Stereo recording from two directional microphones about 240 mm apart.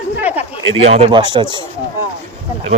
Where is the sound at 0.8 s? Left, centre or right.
Right.